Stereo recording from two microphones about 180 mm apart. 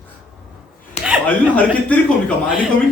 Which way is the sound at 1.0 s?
40° left (ahead or behind).